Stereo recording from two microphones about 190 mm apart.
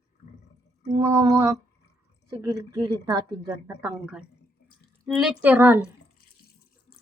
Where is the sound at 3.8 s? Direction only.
5° right (ahead or behind).